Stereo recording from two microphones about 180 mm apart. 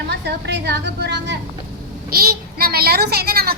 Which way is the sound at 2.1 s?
55° right (ahead or behind).